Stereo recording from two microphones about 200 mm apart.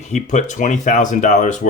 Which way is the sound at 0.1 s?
35° left (ahead or behind).